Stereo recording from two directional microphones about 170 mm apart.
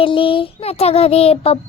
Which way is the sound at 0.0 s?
30° left (ahead or behind).